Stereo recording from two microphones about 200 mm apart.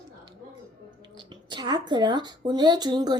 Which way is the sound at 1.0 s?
25° right (ahead or behind).